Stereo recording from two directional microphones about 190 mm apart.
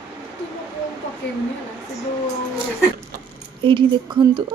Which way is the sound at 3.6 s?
25° right (ahead or behind).